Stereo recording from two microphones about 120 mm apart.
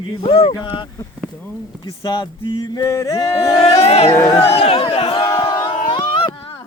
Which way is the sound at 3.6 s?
55° left (ahead or behind).